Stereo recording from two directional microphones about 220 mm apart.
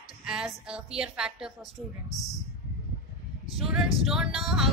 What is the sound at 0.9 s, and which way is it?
Speech, 5° right (ahead or behind).